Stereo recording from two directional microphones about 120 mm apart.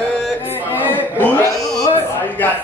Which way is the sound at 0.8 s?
15° left (ahead or behind).